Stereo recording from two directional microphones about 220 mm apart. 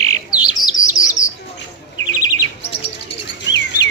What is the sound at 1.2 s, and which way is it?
Bird, 35° left (ahead or behind).